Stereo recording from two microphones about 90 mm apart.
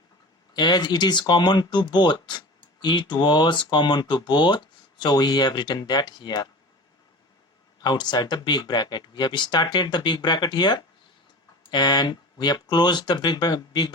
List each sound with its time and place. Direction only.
0.5 s speech: 55° left (ahead or behind)
7.8 s speech: 55° left (ahead or behind)